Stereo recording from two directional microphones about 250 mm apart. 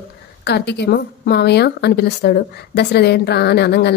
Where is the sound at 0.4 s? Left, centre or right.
Left.